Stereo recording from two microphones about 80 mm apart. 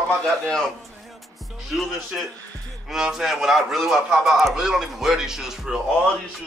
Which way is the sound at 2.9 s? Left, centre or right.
Centre.